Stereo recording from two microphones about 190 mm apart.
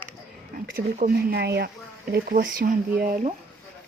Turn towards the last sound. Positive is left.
turn(degrees=-50)  # may be behind; listen again after turning